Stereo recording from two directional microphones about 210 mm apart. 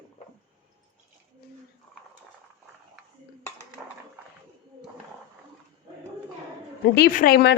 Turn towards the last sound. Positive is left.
turn(degrees=45)  # may be behind; listen again after turning